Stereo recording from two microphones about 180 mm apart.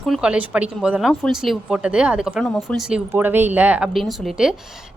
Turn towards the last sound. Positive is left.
turn(degrees=0)  # may be behind; listen again after turning